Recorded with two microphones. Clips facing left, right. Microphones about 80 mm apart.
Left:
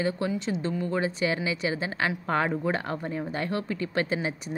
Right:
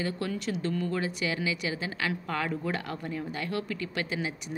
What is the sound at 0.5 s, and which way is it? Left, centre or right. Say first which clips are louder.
A woman's voice: left 2 dB; left.